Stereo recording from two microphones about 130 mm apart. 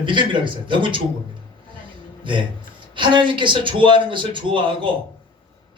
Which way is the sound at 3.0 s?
40° right (ahead or behind).